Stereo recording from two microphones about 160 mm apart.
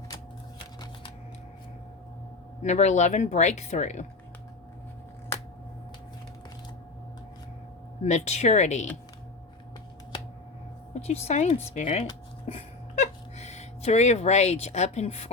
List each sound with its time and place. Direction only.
2.6 s speech: 45° left (ahead or behind)
8.0 s speech: 45° left (ahead or behind)
11.0 s speech: 40° left (ahead or behind)